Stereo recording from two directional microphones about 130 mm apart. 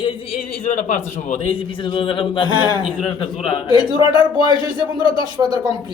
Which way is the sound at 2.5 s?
35° right (ahead or behind).